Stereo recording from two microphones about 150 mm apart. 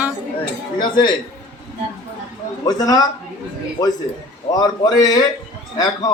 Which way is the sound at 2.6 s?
25° left (ahead or behind).